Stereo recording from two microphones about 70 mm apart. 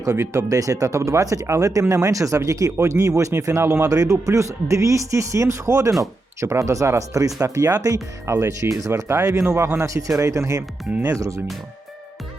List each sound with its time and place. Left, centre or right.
0.0 s speech: right
3.8 s speech: right
8.9 s speech: right